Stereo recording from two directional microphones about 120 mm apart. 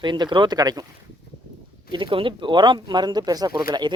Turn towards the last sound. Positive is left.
turn(degrees=-35)  # may be behind; listen again after turning